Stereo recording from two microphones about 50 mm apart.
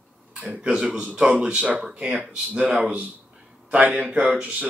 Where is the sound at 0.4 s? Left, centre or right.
Centre.